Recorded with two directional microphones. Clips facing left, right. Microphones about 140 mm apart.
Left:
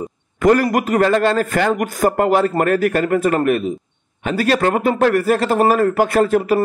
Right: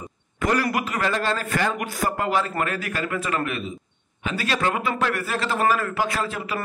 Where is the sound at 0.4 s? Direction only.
45° left (ahead or behind).